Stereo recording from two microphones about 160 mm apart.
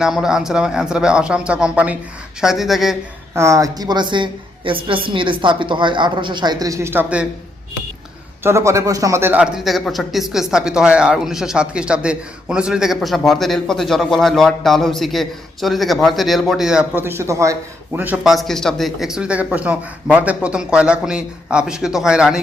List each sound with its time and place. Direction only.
0.0 s a man's voice: 5° right (ahead or behind)
3.3 s a woman's voice: 20° right (ahead or behind)
8.4 s a man's voice: 20° right (ahead or behind)